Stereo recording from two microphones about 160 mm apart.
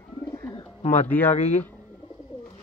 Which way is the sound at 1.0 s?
10° left (ahead or behind).